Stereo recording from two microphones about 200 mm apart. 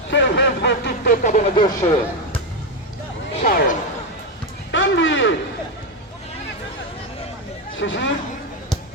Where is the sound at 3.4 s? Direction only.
40° left (ahead or behind).